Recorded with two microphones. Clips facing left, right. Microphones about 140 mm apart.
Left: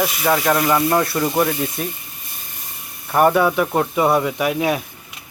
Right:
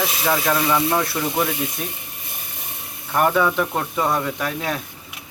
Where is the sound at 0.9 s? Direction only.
Centre (ahead or behind).